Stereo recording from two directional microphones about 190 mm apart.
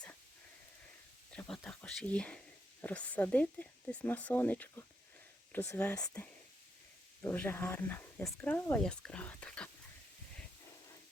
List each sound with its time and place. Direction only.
1.3 s whispering: 5° left (ahead or behind)
2.8 s speech: 10° left (ahead or behind)